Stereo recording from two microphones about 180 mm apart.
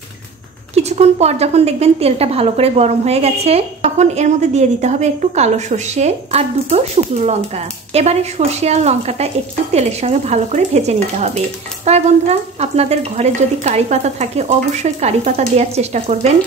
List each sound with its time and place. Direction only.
0.7 s a woman's voice: 35° right (ahead or behind)